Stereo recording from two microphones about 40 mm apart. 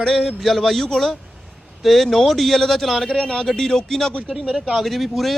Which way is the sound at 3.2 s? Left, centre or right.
Left.